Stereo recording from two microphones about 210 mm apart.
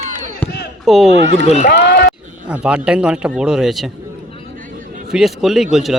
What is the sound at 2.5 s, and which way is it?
Speech, 5° right (ahead or behind).